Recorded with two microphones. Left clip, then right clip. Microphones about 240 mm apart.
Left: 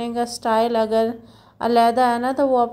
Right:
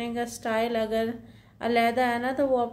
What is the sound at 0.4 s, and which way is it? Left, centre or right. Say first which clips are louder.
A woman's voice: left 8 dB; left.